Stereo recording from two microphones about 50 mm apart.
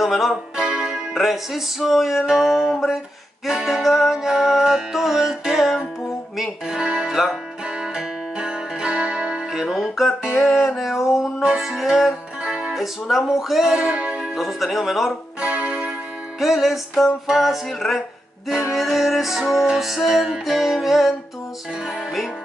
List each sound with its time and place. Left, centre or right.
0.0 s music: centre
0.6 s music: centre
1.1 s music: centre
2.7 s music: centre
3.4 s music: centre
6.8 s music: centre
11.4 s music: centre
12.7 s music: centre
13.8 s music: right
14.3 s music: centre
15.4 s music: right
16.3 s music: centre